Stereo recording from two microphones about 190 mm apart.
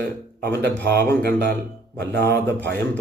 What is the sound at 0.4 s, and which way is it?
Speech, 60° right (ahead or behind).